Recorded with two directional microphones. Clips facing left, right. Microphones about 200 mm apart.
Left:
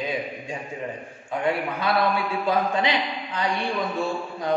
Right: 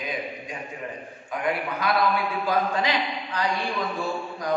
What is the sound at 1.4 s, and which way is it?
A man's voice, 25° left (ahead or behind).